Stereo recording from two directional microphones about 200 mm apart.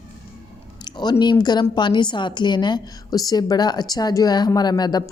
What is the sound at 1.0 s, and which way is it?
A woman's voice, 20° left (ahead or behind).